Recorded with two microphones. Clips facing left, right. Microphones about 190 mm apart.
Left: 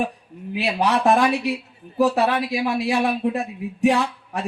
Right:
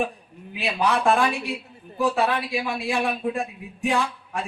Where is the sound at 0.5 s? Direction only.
40° left (ahead or behind).